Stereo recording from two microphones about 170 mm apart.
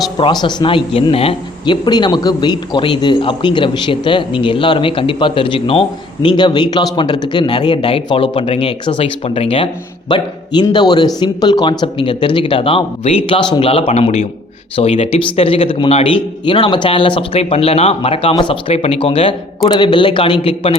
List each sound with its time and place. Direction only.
0.2 s speech: 30° left (ahead or behind)